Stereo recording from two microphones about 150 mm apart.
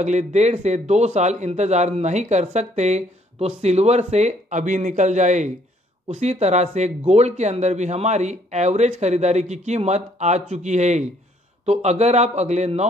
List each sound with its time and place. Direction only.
0.0 s a man's voice: 50° right (ahead or behind)